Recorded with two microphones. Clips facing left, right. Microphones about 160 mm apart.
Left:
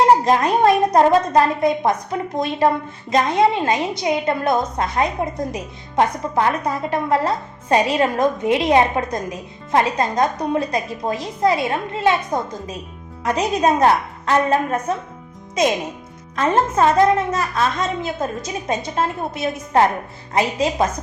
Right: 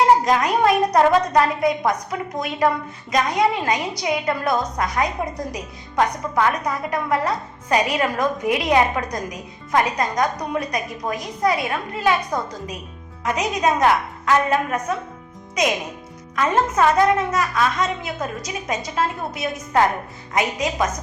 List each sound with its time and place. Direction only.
0.3 s a woman's voice: 30° left (ahead or behind)
16.3 s a woman's voice: 30° left (ahead or behind)